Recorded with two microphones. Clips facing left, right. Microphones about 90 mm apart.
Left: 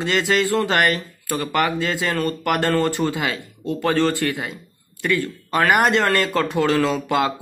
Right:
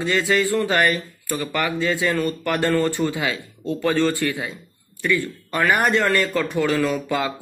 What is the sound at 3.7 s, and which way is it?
Speech, 20° left (ahead or behind).